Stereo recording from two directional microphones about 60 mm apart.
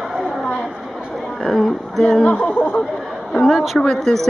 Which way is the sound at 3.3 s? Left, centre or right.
Centre.